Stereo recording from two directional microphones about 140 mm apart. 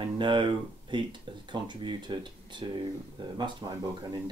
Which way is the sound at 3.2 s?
30° right (ahead or behind).